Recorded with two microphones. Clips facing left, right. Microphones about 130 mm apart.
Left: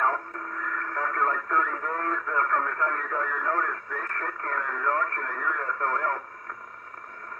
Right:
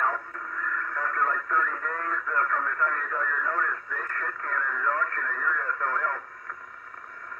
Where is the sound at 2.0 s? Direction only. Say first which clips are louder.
Left 2 dB; 25° left (ahead or behind).